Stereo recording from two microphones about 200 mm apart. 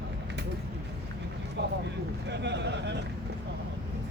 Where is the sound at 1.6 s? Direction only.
55° right (ahead or behind).